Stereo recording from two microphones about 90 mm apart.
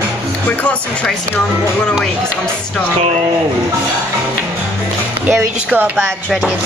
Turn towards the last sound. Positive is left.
turn(degrees=-15)  # may be behind; listen again after turning